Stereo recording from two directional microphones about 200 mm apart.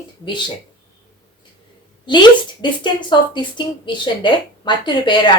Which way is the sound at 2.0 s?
20° left (ahead or behind).